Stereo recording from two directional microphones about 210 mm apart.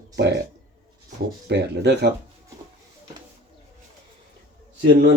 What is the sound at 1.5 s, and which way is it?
Speech, 55° right (ahead or behind).